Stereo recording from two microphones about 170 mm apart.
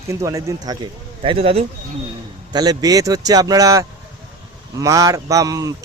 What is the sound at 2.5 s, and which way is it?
Speech, 25° right (ahead or behind).